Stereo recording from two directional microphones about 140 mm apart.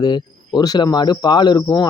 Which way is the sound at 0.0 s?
30° left (ahead or behind).